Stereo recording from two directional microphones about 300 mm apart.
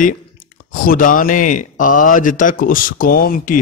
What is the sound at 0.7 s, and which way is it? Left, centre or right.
Speech, left.